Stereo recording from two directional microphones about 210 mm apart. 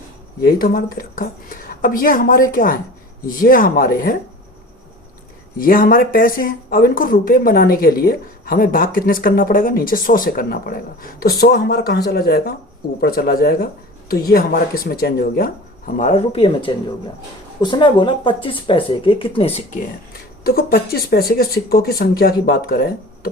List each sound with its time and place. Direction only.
0.4 s speech: 45° left (ahead or behind)
5.5 s speech: 40° left (ahead or behind)
16.0 s speech: 30° left (ahead or behind)
20.4 s speech: 45° left (ahead or behind)